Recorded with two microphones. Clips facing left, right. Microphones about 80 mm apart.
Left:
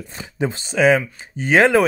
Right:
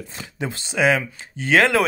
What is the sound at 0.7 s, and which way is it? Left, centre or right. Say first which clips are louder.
Speech: left 3 dB; centre.